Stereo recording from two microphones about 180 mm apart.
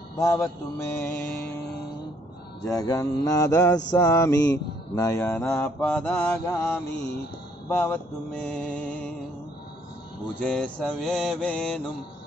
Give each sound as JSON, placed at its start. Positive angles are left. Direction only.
{"t": 0.2, "sound": "mantra", "side_deg": 15}
{"t": 2.6, "sound": "mantra", "side_deg": 20}
{"t": 10.4, "sound": "mantra", "side_deg": 5}